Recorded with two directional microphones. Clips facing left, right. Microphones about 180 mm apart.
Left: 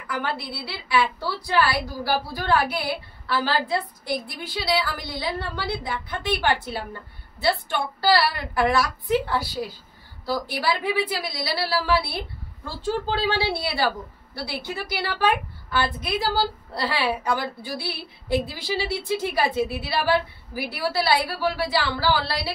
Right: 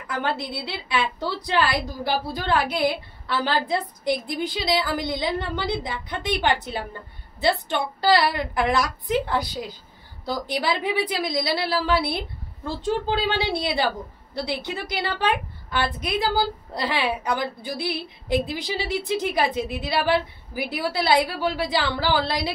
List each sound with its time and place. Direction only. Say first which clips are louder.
0.1 s a woman's voice: right 2 dB; 20° right (ahead or behind)
8.0 s a woman's voice: right 1 dB; 20° right (ahead or behind)